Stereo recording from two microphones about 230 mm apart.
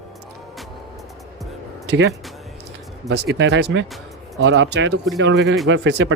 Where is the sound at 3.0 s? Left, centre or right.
Right.